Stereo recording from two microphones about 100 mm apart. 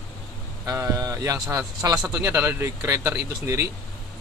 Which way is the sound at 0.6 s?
35° right (ahead or behind).